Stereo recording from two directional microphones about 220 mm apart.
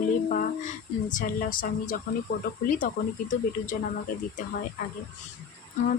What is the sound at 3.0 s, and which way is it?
Speech, 40° left (ahead or behind).